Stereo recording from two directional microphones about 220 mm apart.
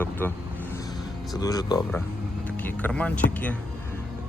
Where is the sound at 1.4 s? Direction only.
15° left (ahead or behind).